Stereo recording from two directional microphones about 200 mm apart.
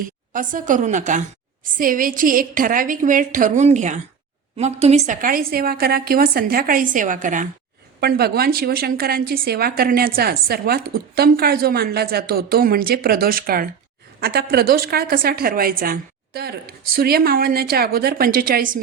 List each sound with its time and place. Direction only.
0.3 s a woman's voice: 40° right (ahead or behind)
8.0 s a woman's voice: 50° right (ahead or behind)